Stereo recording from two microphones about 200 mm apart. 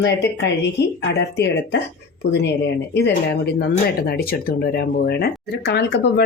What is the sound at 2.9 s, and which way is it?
Speech, 60° left (ahead or behind).